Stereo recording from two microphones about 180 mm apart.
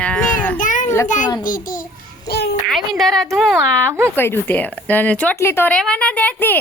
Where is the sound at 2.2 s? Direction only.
65° left (ahead or behind).